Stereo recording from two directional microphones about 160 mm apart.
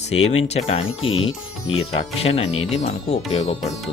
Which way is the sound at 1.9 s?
40° left (ahead or behind).